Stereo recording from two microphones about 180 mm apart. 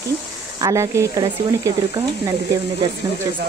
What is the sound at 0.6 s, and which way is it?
Speech, 15° right (ahead or behind).